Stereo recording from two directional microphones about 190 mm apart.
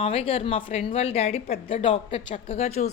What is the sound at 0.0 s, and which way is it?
A woman's voice, 30° left (ahead or behind).